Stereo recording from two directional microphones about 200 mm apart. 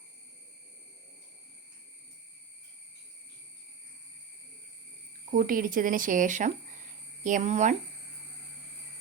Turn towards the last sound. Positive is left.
turn(degrees=-35)  # may be behind; listen again after turning